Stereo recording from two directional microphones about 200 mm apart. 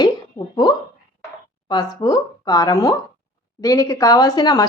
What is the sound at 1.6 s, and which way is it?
Speech, 20° left (ahead or behind).